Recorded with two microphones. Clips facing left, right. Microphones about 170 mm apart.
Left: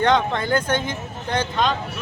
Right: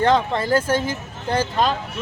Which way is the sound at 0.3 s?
30° right (ahead or behind).